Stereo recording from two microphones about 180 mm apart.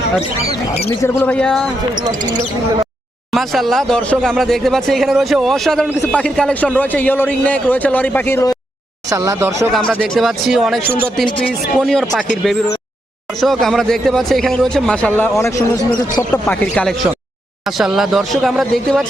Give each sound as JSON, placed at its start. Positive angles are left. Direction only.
{"t": 1.0, "sound": "speech", "side_deg": 10}
{"t": 3.3, "sound": "speech", "side_deg": 0}
{"t": 9.0, "sound": "speech", "side_deg": -15}
{"t": 9.9, "sound": "speech", "side_deg": -5}
{"t": 13.4, "sound": "speech", "side_deg": 0}
{"t": 16.3, "sound": "speech", "side_deg": 10}